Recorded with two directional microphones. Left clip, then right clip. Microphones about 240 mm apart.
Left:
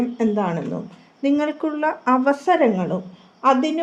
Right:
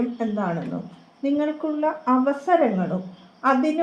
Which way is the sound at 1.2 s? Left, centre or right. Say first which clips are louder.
Left 3 dB; left.